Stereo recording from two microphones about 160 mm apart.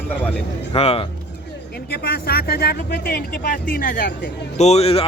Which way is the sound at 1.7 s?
85° left.